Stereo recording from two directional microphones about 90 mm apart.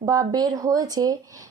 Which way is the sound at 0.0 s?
45° right (ahead or behind).